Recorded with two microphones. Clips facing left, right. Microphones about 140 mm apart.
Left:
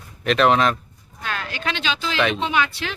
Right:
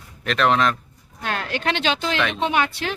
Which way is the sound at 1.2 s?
60° right (ahead or behind).